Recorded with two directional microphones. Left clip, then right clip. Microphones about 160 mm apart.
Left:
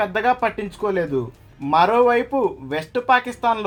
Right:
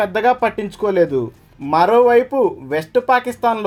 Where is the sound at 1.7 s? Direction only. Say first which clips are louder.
Right 3 dB; 50° right (ahead or behind).